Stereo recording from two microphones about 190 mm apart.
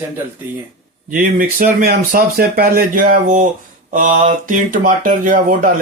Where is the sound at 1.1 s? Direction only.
45° right (ahead or behind).